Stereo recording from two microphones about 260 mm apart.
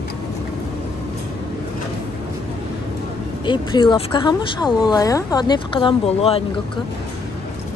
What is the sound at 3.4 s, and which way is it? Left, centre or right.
A woman's voice, centre.